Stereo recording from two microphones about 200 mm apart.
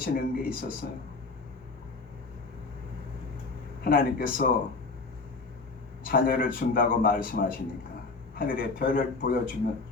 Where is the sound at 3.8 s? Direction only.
45° left (ahead or behind).